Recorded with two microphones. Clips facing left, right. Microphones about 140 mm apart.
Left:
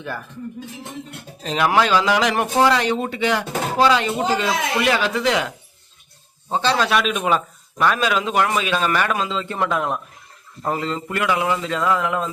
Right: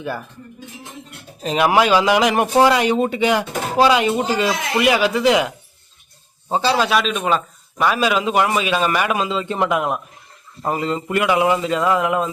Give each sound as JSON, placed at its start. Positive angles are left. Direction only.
{"t": 0.0, "sound": "speech", "side_deg": -10}
{"t": 1.5, "sound": "speech", "side_deg": -15}
{"t": 6.5, "sound": "a man's voice", "side_deg": -10}
{"t": 7.8, "sound": "speech", "side_deg": -5}